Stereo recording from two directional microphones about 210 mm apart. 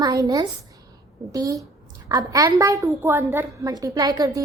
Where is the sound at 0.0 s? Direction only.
15° right (ahead or behind).